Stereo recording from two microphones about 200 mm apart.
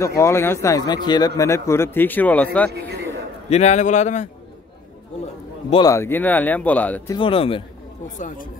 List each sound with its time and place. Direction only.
0.0 s a man's voice: 15° left (ahead or behind)
3.4 s speech: 35° left (ahead or behind)
5.7 s a man's voice: 20° left (ahead or behind)
7.2 s speech: 25° left (ahead or behind)